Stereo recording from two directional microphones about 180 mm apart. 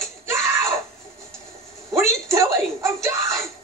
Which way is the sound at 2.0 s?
15° right (ahead or behind).